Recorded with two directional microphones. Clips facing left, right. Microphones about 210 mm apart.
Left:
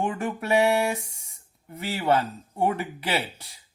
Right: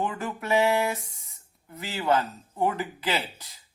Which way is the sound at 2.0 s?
30° left (ahead or behind).